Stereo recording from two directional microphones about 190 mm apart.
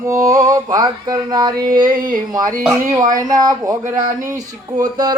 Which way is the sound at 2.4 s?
45° right (ahead or behind).